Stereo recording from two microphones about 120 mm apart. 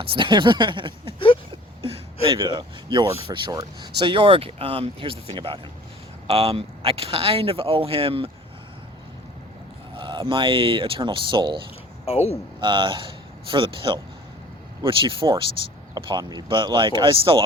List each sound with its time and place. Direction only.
0.0 s speech: 45° right (ahead or behind)
2.3 s speech: 40° right (ahead or behind)
3.5 s speech: 30° right (ahead or behind)
4.0 s speech: 45° right (ahead or behind)
9.9 s speech: 45° right (ahead or behind)
12.0 s speech: 55° left (ahead or behind)
12.5 s speech: 40° right (ahead or behind)